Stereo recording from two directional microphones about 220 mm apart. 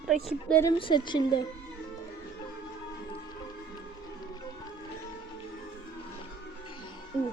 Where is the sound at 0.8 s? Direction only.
20° left (ahead or behind).